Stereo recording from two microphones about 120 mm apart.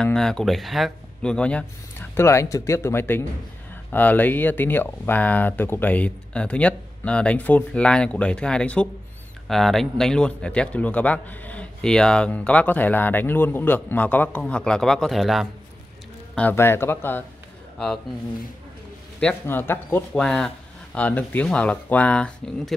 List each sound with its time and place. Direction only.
0.0 s speech: 5° left (ahead or behind)
16.3 s speech: 15° left (ahead or behind)
19.1 s speech: 15° left (ahead or behind)
20.2 s speech: 5° left (ahead or behind)